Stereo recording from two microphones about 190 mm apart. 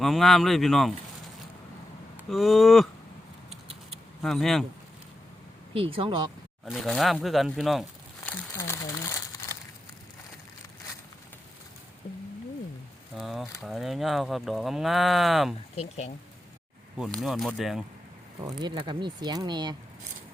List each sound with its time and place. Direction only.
0.0 s speech: centre (ahead or behind)
2.1 s a sound: centre (ahead or behind)
4.2 s speech: centre (ahead or behind)
5.7 s speech: 30° right (ahead or behind)
6.7 s a sound: centre (ahead or behind); by 9.6 s 15° left (ahead or behind)
13.1 s speech: centre (ahead or behind)
15.7 s speech: 35° left (ahead or behind)
17.0 s speech: centre (ahead or behind)
18.3 s speech: 20° right (ahead or behind)